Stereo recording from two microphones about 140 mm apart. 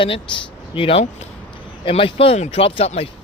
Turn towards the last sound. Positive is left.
turn(degrees=45)  # may be behind; listen again after turning